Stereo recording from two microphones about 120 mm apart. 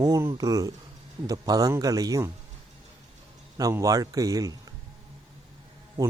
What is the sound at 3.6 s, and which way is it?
A man's voice, 30° right (ahead or behind).